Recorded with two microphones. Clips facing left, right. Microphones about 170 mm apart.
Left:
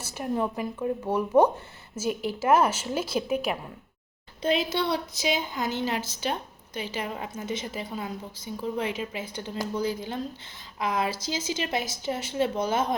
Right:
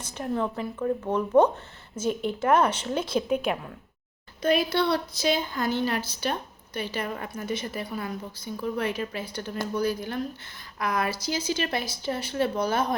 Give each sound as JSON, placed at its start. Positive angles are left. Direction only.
{"t": 0.0, "sound": "speech", "side_deg": 10}
{"t": 4.4, "sound": "a woman's voice", "side_deg": 20}